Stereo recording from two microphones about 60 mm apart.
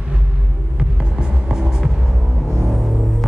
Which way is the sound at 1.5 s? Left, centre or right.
Centre.